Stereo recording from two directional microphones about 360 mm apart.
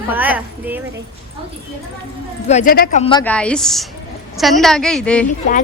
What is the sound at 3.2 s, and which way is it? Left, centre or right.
A woman's voice, centre.